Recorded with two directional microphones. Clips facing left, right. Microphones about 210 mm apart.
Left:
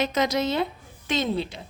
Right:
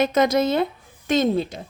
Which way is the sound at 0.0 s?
50° right (ahead or behind).